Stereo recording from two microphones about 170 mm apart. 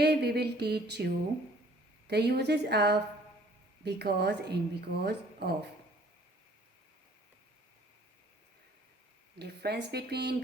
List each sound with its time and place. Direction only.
0.0 s a woman's voice: 70° right (ahead or behind)
9.4 s a woman's voice: 70° right (ahead or behind)